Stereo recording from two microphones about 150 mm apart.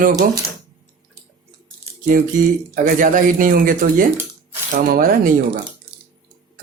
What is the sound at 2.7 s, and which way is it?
Speech, 60° right (ahead or behind).